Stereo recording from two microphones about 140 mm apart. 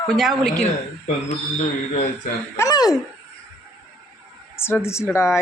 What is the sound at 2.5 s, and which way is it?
Speech, 25° left (ahead or behind).